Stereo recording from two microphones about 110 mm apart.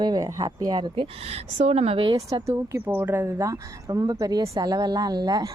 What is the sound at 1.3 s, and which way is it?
Speech, 70° right (ahead or behind).